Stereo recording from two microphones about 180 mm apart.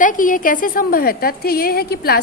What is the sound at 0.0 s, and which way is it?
A woman's voice, 50° left (ahead or behind).